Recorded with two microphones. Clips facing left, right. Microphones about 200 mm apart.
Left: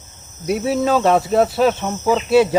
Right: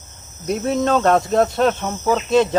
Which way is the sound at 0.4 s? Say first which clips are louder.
Left 1 dB; 5° left (ahead or behind).